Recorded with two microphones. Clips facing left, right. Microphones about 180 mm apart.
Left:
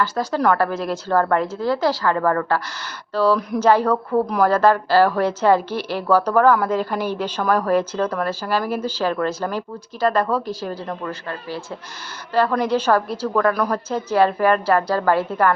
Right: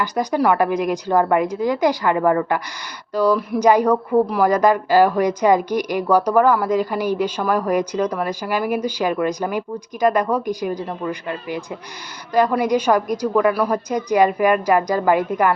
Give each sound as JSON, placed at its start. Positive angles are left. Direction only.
{"t": 0.0, "sound": "a woman's voice", "side_deg": -15}